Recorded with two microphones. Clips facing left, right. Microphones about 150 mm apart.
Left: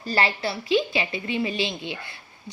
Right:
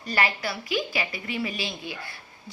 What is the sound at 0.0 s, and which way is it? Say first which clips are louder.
A woman's voice: left 2 dB; 30° left (ahead or behind).